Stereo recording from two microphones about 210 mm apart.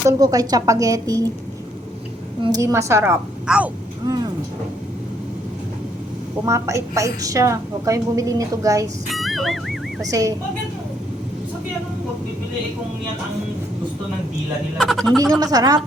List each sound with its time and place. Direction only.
0.1 s a woman's voice: 15° right (ahead or behind)
2.4 s a woman's voice: 15° right (ahead or behind)
6.4 s a woman's voice: 15° right (ahead or behind)
9.1 s speech: centre (ahead or behind)
10.1 s a woman's voice: 15° right (ahead or behind)
14.8 s speech: centre (ahead or behind)
15.2 s a woman's voice: 20° right (ahead or behind)